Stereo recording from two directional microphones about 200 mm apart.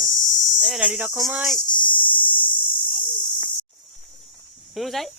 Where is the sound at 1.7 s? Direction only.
25° left (ahead or behind).